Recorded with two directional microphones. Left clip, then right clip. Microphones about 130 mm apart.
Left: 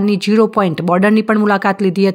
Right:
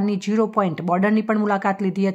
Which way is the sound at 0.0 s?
25° left (ahead or behind).